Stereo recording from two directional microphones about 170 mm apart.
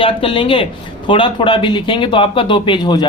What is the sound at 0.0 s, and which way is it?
Speech, 30° left (ahead or behind).